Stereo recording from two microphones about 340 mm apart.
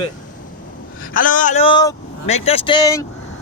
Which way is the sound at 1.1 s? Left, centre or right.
Left.